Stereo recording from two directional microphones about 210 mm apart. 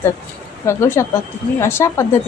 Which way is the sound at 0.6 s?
15° left (ahead or behind).